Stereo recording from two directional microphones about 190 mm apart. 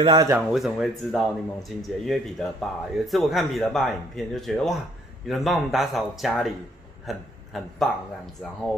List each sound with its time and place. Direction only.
0.0 s speech: 20° right (ahead or behind)
0.5 s a man's voice: centre (ahead or behind)